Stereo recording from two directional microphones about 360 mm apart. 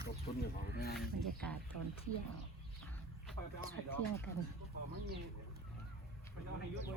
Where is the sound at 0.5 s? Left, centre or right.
Left.